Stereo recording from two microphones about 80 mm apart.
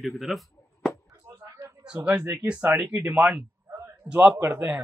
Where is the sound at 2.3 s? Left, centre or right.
Centre.